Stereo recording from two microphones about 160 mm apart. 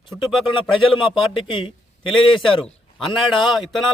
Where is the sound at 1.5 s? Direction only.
30° left (ahead or behind).